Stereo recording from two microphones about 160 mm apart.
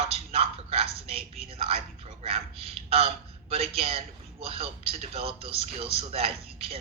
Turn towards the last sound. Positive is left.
turn(degrees=-40)  # may be behind; listen again after turning